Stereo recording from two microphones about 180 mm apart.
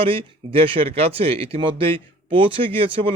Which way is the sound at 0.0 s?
30° right (ahead or behind).